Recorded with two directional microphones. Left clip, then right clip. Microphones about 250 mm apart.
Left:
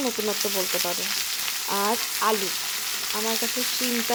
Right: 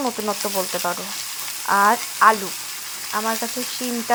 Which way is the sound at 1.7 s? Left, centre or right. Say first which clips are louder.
Right 10 dB; centre.